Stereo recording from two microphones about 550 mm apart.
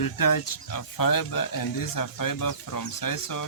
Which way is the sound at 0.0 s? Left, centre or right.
Left.